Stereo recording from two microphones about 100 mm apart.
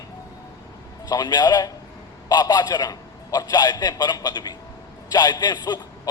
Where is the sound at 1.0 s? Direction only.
40° left (ahead or behind).